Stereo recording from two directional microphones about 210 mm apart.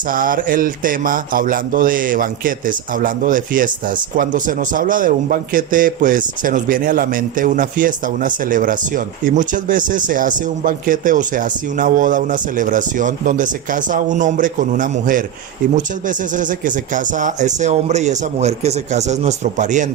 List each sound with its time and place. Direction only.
0.1 s speech: 40° right (ahead or behind)